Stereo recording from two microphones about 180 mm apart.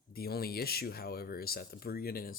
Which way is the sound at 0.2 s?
60° left (ahead or behind).